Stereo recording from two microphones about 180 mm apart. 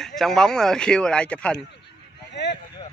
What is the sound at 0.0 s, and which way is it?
Speech, centre (ahead or behind).